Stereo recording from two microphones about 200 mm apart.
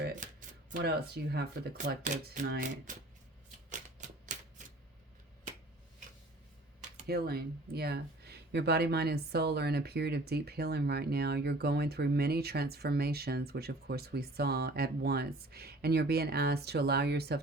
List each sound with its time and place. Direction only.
0.0 s shuffling cards: 40° right (ahead or behind)
0.8 s speech: 55° right (ahead or behind)
2.0 s speech: 40° right (ahead or behind)
3.7 s typewriter: 40° right (ahead or behind)
7.1 s speech: 50° right (ahead or behind)